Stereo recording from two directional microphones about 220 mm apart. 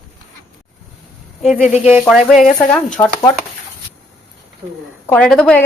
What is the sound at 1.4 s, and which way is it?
Speech, centre (ahead or behind).